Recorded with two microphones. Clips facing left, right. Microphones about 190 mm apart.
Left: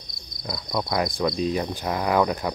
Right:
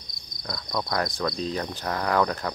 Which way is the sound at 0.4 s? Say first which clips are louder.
Left 3 dB; 5° left (ahead or behind).